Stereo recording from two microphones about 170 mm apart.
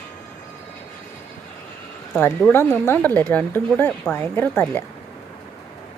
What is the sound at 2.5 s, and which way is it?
Speech, 10° left (ahead or behind).